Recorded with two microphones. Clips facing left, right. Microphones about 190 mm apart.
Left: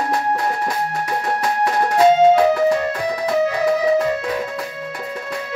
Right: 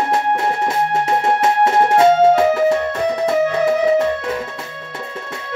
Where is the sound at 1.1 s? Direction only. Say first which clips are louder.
Right 5 dB; 25° right (ahead or behind).